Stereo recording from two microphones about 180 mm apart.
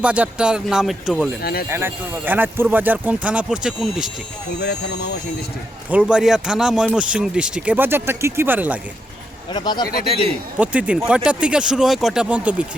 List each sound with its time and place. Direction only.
0.0 s speech: 5° right (ahead or behind)
1.4 s speech: 60° left (ahead or behind)
1.7 s speech: 10° right (ahead or behind)
4.6 s speech: 65° left (ahead or behind)
5.9 s speech: 5° right (ahead or behind)
9.5 s speech: 25° left (ahead or behind)
9.9 s a man's voice: 35° right (ahead or behind)
10.6 s speech: 5° right (ahead or behind)